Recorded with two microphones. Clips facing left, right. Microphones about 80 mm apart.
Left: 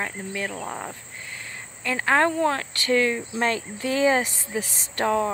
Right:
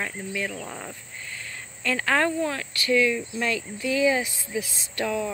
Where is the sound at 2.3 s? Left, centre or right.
Left.